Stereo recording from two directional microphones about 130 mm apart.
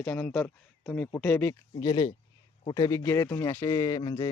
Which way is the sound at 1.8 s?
25° left (ahead or behind).